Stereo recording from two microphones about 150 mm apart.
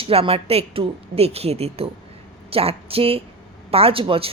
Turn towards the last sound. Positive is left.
turn(degrees=-40)  # may be behind; listen again after turning